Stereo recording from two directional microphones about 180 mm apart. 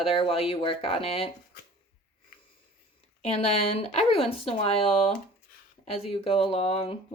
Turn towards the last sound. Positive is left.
turn(degrees=35)  # may be behind; listen again after turning